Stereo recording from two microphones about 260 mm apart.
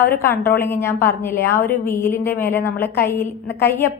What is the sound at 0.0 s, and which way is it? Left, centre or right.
A woman's voice, centre.